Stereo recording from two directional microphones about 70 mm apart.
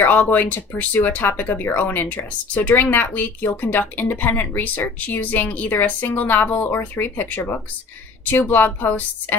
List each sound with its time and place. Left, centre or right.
0.0 s speech: left